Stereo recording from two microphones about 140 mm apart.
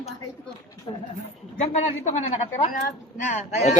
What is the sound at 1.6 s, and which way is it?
Speech, 50° left (ahead or behind).